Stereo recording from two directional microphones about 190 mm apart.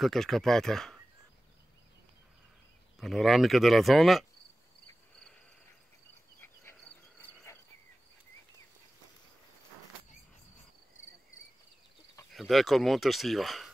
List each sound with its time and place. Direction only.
0.0 s speech: centre (ahead or behind)
3.0 s speech: centre (ahead or behind)
6.4 s insect: 10° left (ahead or behind)
12.3 s speech: centre (ahead or behind)